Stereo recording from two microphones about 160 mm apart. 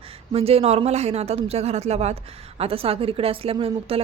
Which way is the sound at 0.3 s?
40° right (ahead or behind).